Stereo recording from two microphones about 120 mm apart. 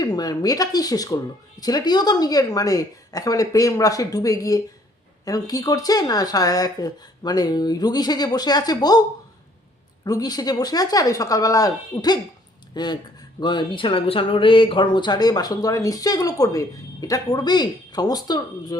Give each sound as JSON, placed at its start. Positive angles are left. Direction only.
{"t": 0.0, "sound": "speech", "side_deg": 30}
{"t": 10.0, "sound": "speech", "side_deg": 30}